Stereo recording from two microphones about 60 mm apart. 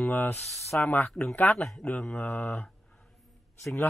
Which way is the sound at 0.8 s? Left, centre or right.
Left.